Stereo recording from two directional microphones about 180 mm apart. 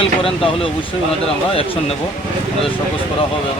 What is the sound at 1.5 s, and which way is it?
Speech, 30° left (ahead or behind).